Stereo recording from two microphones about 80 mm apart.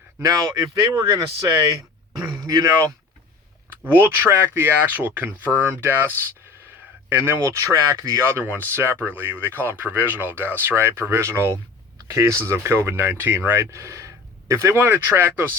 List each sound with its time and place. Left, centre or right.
0.2 s speech: right
2.4 s speech: right
3.8 s speech: right
7.4 s speech: right